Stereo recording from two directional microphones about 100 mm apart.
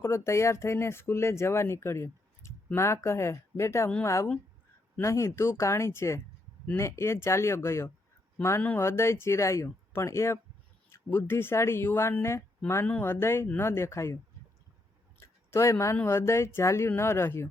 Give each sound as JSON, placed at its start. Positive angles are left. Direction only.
{"t": 0.0, "sound": "speech", "side_deg": 30}
{"t": 15.4, "sound": "a sound", "side_deg": 25}
{"t": 15.7, "sound": "speech", "side_deg": 30}